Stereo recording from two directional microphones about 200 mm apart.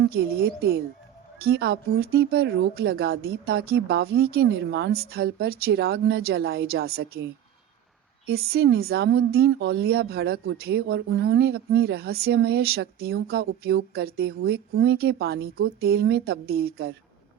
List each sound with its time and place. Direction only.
0.1 s speech: 50° right (ahead or behind)
8.3 s speech: 50° right (ahead or behind)